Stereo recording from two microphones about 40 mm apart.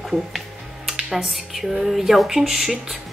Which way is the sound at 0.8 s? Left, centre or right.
Centre.